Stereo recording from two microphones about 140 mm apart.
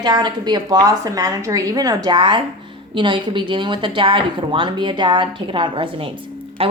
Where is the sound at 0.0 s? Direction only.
30° right (ahead or behind).